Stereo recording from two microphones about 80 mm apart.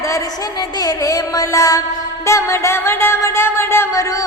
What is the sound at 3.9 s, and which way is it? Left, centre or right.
Music, left.